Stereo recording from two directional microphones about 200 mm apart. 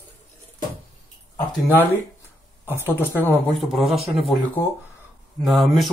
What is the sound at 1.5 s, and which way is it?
Speech, centre (ahead or behind).